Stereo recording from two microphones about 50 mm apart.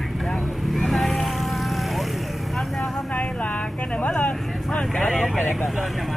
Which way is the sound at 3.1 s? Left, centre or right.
Left.